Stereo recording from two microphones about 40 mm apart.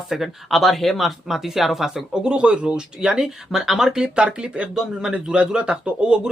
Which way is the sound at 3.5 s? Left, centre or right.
Centre.